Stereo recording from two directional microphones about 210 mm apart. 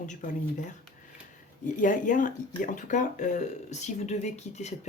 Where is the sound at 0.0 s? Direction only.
35° left (ahead or behind).